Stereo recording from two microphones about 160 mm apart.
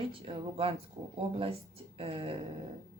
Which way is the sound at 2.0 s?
35° right (ahead or behind).